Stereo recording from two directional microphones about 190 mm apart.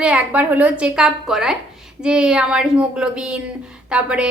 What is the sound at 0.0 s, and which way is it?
Speech, 5° right (ahead or behind).